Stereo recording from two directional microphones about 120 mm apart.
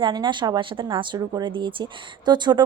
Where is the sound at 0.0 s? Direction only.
35° right (ahead or behind).